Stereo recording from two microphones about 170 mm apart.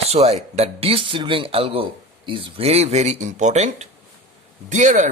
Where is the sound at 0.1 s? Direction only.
40° right (ahead or behind).